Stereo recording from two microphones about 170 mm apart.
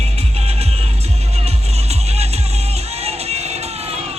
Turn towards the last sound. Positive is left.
turn(degrees=-40)  # may be behind; listen again after turning